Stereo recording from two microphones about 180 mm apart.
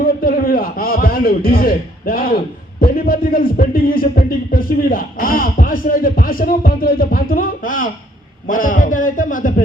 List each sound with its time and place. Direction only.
0.2 s a man's voice: 55° left (ahead or behind)